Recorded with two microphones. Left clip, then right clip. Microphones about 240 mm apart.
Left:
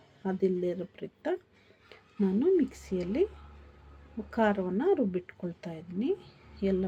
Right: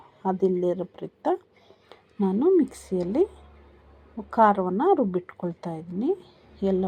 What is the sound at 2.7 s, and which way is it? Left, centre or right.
Speech, centre.